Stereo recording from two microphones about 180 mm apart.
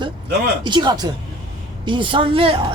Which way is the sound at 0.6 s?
25° right (ahead or behind).